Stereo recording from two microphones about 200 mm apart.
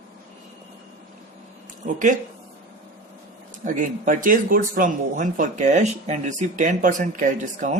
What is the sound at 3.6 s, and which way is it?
Speech, 40° right (ahead or behind).